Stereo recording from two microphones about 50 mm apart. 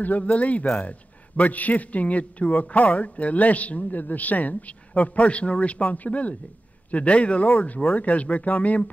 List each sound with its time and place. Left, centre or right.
0.0 s a man's voice: left